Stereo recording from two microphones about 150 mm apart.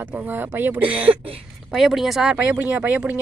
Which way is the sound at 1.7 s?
Centre (ahead or behind).